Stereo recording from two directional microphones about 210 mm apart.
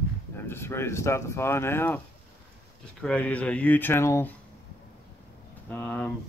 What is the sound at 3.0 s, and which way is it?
Speech, 5° left (ahead or behind).